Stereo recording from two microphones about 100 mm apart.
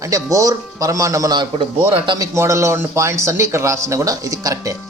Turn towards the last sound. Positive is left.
turn(degrees=-35)  # may be behind; listen again after turning